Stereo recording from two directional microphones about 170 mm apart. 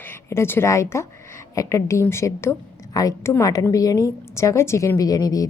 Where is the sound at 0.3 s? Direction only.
15° left (ahead or behind).